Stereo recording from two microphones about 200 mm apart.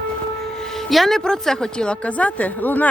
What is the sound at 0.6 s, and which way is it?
A woman's voice, centre (ahead or behind).